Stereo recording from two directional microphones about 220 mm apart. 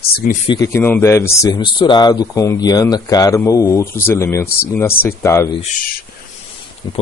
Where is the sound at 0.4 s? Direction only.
20° left (ahead or behind).